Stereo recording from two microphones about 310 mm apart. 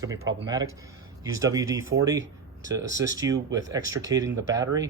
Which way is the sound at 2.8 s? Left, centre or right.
Right.